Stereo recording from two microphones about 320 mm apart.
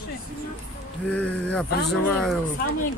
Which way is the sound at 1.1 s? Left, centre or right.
Centre.